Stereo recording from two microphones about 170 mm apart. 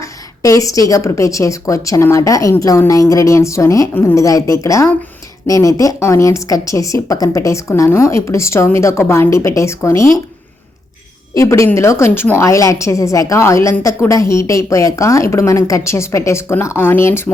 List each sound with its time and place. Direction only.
0.0 s a woman's voice: 20° left (ahead or behind)
11.3 s a woman's voice: 15° left (ahead or behind)